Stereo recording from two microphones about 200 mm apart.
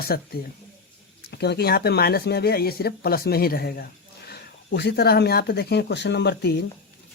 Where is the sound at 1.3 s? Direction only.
55° left (ahead or behind).